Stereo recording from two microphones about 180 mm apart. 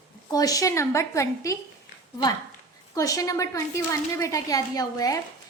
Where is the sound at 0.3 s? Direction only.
20° left (ahead or behind).